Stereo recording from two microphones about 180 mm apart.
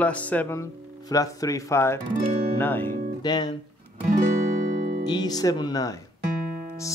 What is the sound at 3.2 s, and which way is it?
Speech, 25° left (ahead or behind).